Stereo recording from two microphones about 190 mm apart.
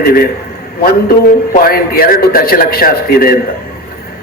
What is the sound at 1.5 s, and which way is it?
A man's voice, 50° left (ahead or behind).